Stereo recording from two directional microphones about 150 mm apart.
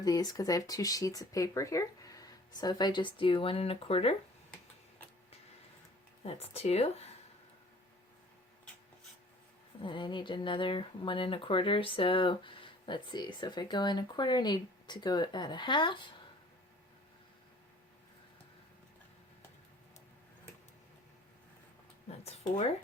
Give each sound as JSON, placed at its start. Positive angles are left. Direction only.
{"t": 0.0, "sound": "speech", "side_deg": 25}
{"t": 6.2, "sound": "speech", "side_deg": 40}
{"t": 9.8, "sound": "speech", "side_deg": 30}
{"t": 22.3, "sound": "speech", "side_deg": 45}